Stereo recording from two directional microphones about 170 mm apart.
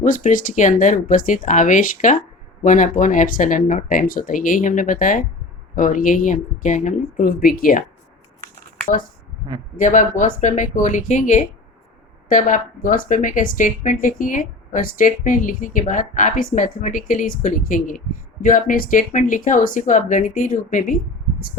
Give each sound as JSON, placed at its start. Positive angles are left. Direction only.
{"t": 0.0, "sound": "speech", "side_deg": 50}
{"t": 9.7, "sound": "speech", "side_deg": 50}